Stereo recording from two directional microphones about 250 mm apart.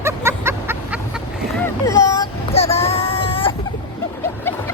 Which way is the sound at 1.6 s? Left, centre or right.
Centre.